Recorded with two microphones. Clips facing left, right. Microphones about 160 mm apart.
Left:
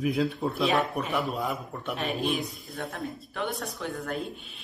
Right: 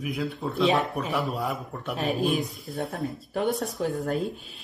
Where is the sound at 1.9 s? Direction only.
40° right (ahead or behind).